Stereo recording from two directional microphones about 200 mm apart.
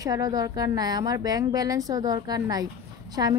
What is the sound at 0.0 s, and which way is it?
A woman's voice, 20° right (ahead or behind).